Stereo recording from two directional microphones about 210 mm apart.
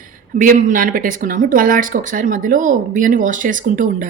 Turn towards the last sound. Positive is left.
turn(degrees=-40)  # may be behind; listen again after turning